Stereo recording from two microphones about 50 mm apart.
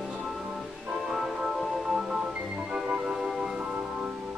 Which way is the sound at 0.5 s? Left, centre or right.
Centre.